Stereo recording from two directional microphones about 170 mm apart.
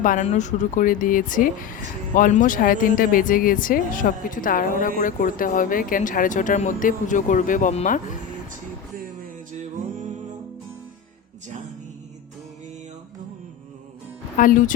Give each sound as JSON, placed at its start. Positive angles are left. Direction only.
{"t": 0.0, "sound": "a woman's voice", "side_deg": 50}
{"t": 9.2, "sound": "music", "side_deg": -45}
{"t": 14.3, "sound": "a woman's voice", "side_deg": 50}